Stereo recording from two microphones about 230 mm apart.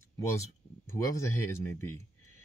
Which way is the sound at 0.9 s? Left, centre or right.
Centre.